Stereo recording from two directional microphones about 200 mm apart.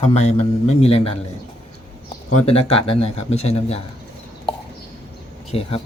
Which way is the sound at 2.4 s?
30° left (ahead or behind).